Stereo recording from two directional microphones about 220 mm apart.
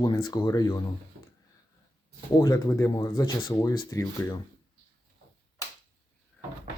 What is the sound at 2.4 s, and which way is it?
Speech, 15° left (ahead or behind).